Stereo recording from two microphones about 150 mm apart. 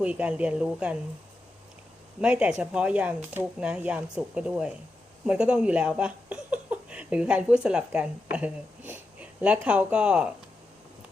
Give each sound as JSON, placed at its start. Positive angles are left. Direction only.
{"t": 0.0, "sound": "speech", "side_deg": -10}
{"t": 2.2, "sound": "speech", "side_deg": -5}